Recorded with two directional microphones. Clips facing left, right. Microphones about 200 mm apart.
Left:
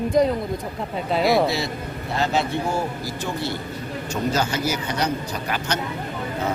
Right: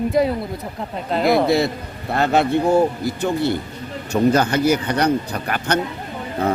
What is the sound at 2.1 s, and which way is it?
Speech, 60° right (ahead or behind).